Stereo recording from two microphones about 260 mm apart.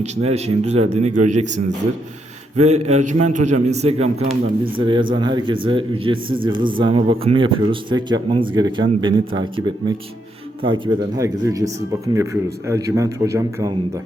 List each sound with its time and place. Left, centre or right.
0.0 s speech: right